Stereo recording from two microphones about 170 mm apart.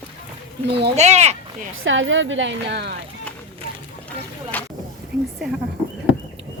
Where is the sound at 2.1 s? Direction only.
90° right.